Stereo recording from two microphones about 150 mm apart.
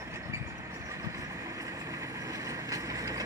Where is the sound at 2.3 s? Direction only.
25° right (ahead or behind).